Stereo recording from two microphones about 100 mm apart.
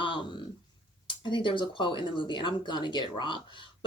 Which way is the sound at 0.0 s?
55° left (ahead or behind).